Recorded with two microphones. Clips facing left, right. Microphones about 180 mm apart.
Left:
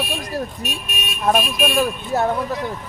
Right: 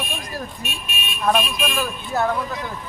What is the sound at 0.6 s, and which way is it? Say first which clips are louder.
Speech: left 3 dB; 40° left (ahead or behind).